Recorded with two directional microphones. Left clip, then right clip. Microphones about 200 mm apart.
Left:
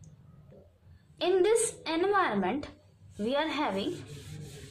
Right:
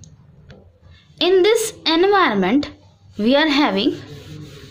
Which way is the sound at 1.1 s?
45° right (ahead or behind).